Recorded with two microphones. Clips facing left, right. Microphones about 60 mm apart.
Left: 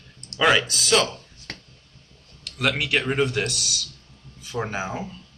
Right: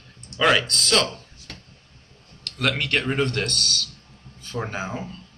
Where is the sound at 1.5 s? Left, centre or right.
Left.